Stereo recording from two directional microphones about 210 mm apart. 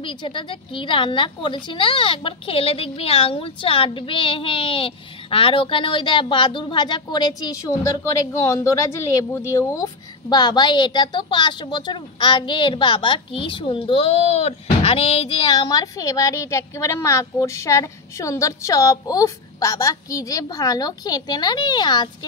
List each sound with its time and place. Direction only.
0.0 s a woman's voice: 25° left (ahead or behind)